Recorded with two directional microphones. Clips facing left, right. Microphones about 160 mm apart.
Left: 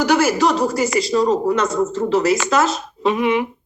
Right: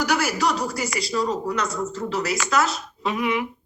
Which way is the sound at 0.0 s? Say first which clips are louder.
Left 7 dB; 25° left (ahead or behind).